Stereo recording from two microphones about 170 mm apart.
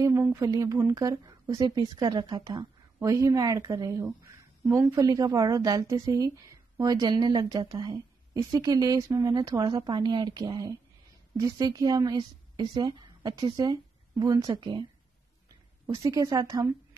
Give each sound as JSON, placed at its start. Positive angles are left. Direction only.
{"t": 0.0, "sound": "speech", "side_deg": -15}
{"t": 15.9, "sound": "speech", "side_deg": -20}